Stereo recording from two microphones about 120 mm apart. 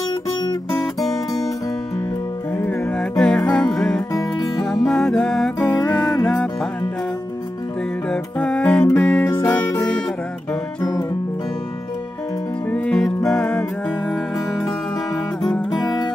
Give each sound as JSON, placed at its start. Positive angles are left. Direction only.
{"t": 0.7, "sound": "music", "side_deg": 0}
{"t": 2.5, "sound": "music", "side_deg": 10}
{"t": 4.1, "sound": "music", "side_deg": 30}
{"t": 4.6, "sound": "music", "side_deg": 5}
{"t": 8.1, "sound": "music", "side_deg": 10}
{"t": 12.7, "sound": "music", "side_deg": 10}
{"t": 15.4, "sound": "music", "side_deg": 0}